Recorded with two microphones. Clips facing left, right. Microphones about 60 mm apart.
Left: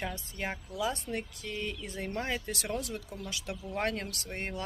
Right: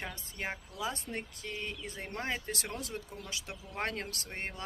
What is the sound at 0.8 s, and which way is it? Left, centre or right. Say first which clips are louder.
Speech: left 5 dB; right.